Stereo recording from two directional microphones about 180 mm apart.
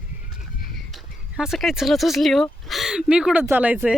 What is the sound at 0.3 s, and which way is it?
Horse, centre (ahead or behind).